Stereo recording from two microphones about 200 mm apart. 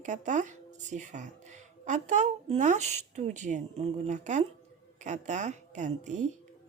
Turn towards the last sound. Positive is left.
turn(degrees=-35)  # may be behind; listen again after turning